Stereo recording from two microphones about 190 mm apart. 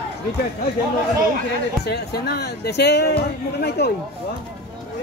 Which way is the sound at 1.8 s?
60° left (ahead or behind).